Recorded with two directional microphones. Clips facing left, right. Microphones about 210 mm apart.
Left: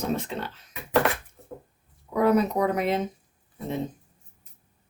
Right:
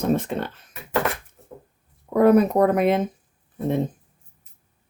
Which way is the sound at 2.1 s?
55° right (ahead or behind).